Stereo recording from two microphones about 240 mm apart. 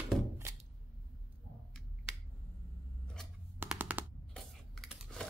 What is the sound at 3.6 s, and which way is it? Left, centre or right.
Machine gun, centre.